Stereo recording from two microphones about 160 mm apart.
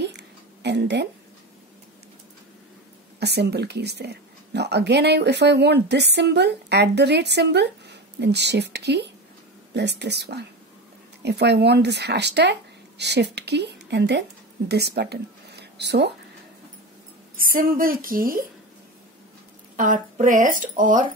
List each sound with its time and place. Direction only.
0.0 s a sound: 90° right
3.2 s speech: 90° right
17.4 s speech: 60° right (ahead or behind)
19.8 s speech: 55° right (ahead or behind)